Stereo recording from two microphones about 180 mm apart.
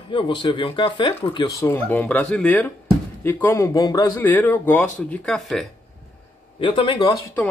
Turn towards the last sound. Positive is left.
turn(degrees=25)  # may be behind; listen again after turning